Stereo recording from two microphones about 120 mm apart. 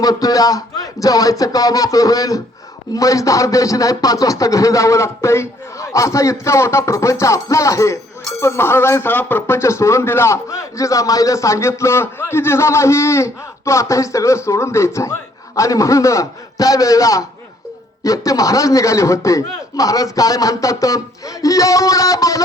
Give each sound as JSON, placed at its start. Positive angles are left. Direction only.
{"t": 0.0, "sound": "speech", "side_deg": 30}